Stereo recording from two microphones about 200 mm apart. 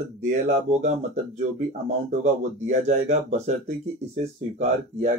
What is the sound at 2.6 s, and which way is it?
Speech, 35° right (ahead or behind).